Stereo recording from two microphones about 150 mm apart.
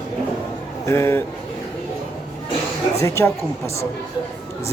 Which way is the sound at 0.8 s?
15° left (ahead or behind).